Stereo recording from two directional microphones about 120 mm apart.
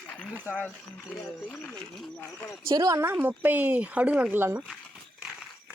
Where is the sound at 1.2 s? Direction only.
15° left (ahead or behind).